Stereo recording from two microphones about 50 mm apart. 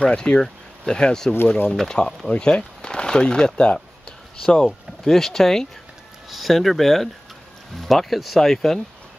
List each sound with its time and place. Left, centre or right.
0.0 s speech: centre